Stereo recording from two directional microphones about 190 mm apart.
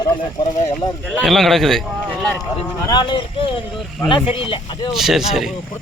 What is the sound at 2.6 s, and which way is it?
Speech, 25° left (ahead or behind).